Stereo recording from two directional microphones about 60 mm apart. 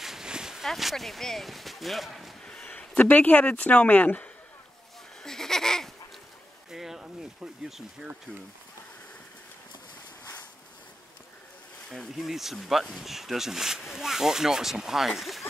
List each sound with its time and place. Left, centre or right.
0.0 s a sound: centre
0.7 s speech: centre
3.0 s speech: left
5.2 s a sound: centre
6.7 s speech: centre
11.9 s speech: centre